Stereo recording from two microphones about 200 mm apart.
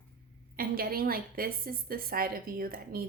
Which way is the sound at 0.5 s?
50° right (ahead or behind).